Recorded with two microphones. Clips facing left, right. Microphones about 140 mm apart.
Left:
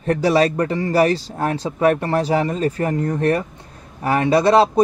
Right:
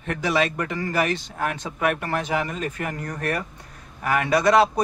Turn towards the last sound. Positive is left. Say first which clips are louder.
# left 4 dB
turn(degrees=30)  # may be behind; listen again after turning